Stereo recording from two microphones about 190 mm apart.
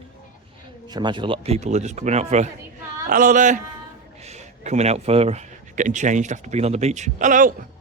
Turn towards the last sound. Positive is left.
turn(degrees=-45)  # may be behind; listen again after turning